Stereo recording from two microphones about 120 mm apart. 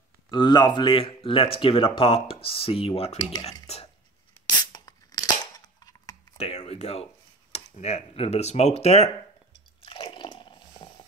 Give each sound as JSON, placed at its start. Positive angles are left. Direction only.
{"t": 0.3, "sound": "speech", "side_deg": 40}
{"t": 4.6, "sound": "a sound", "side_deg": 35}
{"t": 6.3, "sound": "speech", "side_deg": 65}
{"t": 9.8, "sound": "squish", "side_deg": 45}